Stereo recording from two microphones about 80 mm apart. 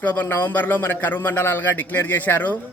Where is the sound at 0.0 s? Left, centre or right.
Left.